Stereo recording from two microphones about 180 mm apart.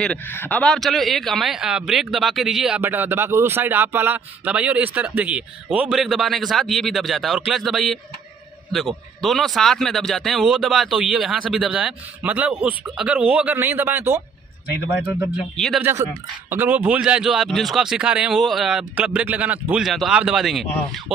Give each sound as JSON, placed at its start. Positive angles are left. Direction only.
{"t": 0.0, "sound": "a man's voice", "side_deg": 10}
{"t": 15.5, "sound": "a man's voice", "side_deg": 0}
{"t": 15.8, "sound": "a man's voice", "side_deg": -15}